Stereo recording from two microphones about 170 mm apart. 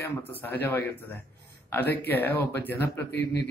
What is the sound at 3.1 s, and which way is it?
Speech, 85° left.